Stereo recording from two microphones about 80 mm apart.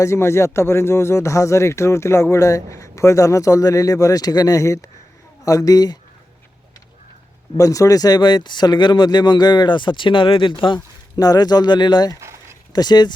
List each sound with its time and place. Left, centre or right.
0.0 s speech: left
7.5 s speech: left
11.2 s speech: left
12.2 s a sound: right
12.7 s speech: left